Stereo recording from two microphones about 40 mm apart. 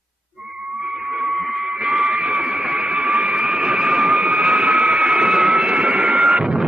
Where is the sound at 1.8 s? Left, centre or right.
Centre.